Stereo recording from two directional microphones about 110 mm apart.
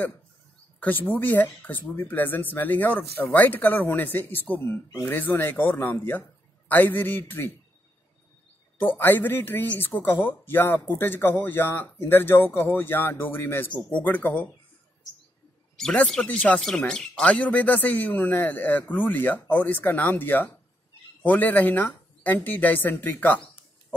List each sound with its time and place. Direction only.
0.7 s speech: 15° left (ahead or behind)
8.7 s speech: 20° left (ahead or behind)
15.7 s a man's voice: 10° left (ahead or behind)